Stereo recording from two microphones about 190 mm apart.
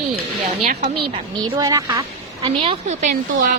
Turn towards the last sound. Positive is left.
turn(degrees=-45)  # may be behind; listen again after turning